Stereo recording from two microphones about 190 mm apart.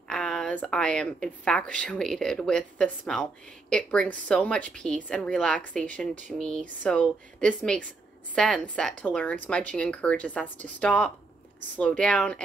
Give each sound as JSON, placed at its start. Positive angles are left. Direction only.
{"t": 0.1, "sound": "speech", "side_deg": 5}